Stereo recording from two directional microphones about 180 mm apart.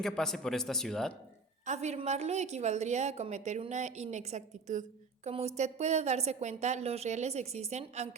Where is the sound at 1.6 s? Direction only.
40° right (ahead or behind).